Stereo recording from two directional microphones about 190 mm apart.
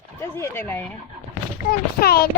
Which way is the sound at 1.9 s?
55° left (ahead or behind).